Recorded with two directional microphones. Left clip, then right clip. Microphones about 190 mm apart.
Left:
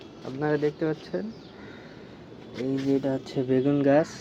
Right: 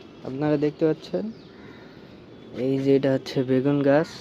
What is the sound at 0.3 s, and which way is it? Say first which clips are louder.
Speech: right 3 dB; 40° right (ahead or behind).